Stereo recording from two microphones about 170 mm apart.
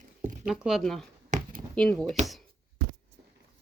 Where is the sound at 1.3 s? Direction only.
50° right (ahead or behind).